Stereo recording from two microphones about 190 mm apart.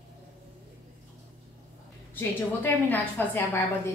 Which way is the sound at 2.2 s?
10° left (ahead or behind).